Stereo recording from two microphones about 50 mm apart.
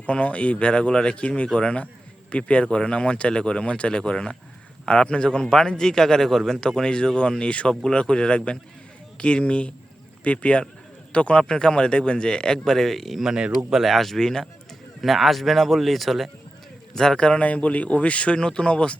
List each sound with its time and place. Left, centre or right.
0.0 s a man's voice: left; by 13.2 s centre
13.2 s speech: centre
13.8 s speech: centre; by 18.9 s left